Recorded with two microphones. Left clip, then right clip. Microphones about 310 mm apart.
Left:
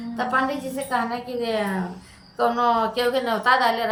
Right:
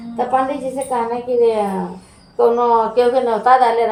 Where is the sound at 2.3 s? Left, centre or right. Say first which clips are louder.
Right 7 dB; left.